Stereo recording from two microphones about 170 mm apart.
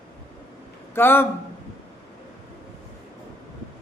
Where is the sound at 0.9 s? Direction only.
10° left (ahead or behind).